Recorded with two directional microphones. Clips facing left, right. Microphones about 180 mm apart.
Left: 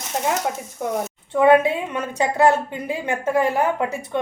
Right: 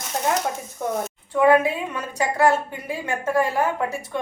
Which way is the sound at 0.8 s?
15° left (ahead or behind).